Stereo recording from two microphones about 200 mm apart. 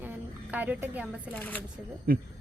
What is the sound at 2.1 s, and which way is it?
Speech, 50° right (ahead or behind).